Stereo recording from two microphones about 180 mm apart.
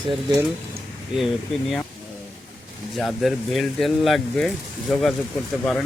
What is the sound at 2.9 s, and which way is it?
Speech, centre (ahead or behind).